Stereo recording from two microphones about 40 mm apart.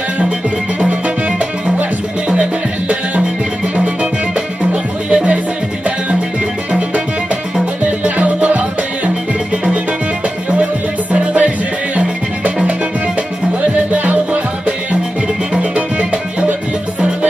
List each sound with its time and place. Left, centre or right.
0.7 s music: right
3.7 s music: right
5.1 s music: right
7.8 s music: right
10.5 s music: right
13.6 s music: right
15.5 s music: right